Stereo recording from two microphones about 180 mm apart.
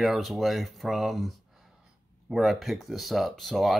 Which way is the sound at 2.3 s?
Centre (ahead or behind).